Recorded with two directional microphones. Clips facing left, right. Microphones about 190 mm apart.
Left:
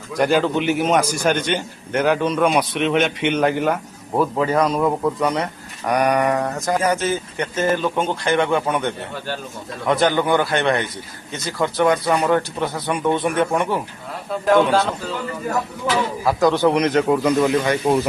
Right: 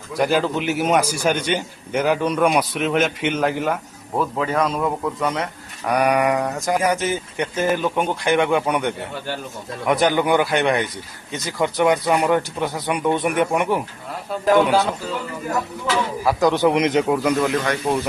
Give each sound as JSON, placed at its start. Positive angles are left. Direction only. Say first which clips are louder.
{"t": 0.1, "sound": "a man's voice", "louder": "left 2 dB", "side_deg": 0}
{"t": 14.5, "sound": "a man's voice", "louder": "even", "side_deg": 0}
{"t": 16.2, "sound": "speech", "louder": "left 1 dB", "side_deg": -15}
{"t": 17.4, "sound": "a man's voice", "louder": "left 3 dB", "side_deg": 5}